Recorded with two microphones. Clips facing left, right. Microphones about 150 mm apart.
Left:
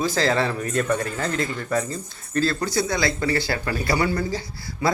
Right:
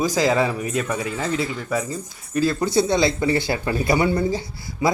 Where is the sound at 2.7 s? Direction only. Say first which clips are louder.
Right 5 dB; 25° right (ahead or behind).